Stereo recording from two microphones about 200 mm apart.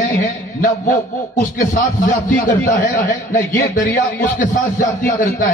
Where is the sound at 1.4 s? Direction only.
40° left (ahead or behind).